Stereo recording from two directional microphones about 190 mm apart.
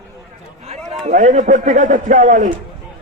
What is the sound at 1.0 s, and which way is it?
A man's voice, 40° right (ahead or behind).